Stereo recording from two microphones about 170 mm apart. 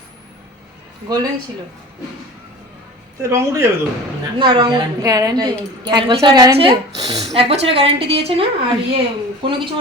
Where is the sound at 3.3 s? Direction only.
15° right (ahead or behind).